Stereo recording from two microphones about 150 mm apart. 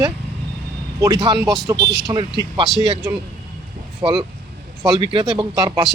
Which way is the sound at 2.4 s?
30° right (ahead or behind).